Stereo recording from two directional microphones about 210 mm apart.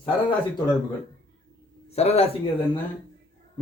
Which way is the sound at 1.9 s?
30° left (ahead or behind).